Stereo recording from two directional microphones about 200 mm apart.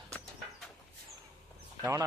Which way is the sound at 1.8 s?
15° right (ahead or behind).